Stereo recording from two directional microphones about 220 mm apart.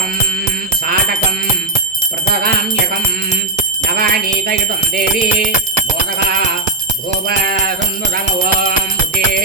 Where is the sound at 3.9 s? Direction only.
45° right (ahead or behind).